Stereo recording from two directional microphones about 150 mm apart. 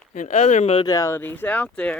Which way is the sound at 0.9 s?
20° left (ahead or behind).